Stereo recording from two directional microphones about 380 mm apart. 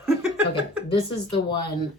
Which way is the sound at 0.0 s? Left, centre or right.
Centre.